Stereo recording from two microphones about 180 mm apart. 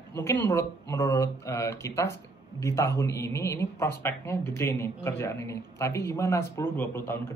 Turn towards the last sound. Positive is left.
turn(degrees=10)  # may be behind; listen again after turning